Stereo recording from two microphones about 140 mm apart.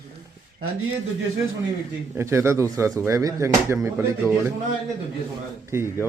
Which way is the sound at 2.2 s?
20° right (ahead or behind).